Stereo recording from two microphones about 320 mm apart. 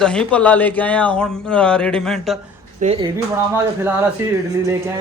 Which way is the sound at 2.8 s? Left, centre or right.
Centre.